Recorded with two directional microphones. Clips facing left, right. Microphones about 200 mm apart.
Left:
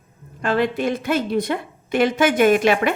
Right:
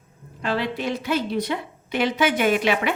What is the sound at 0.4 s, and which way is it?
A woman's voice, 50° left (ahead or behind).